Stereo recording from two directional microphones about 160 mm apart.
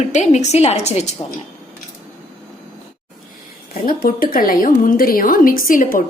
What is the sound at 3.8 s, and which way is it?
A woman's voice, 60° left (ahead or behind).